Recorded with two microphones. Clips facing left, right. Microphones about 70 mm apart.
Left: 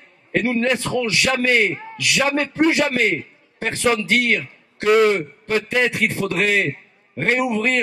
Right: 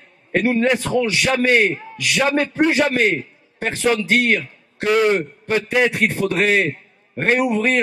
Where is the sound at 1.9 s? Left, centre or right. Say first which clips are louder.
Right 1 dB; centre.